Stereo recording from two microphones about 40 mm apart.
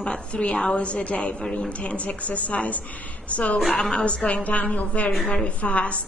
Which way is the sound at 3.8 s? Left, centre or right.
Centre.